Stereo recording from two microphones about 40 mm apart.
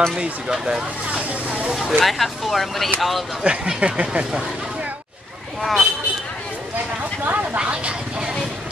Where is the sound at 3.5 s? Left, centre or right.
Right.